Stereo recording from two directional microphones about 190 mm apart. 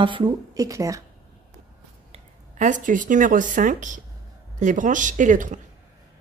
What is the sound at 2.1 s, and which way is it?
Speech, 40° right (ahead or behind).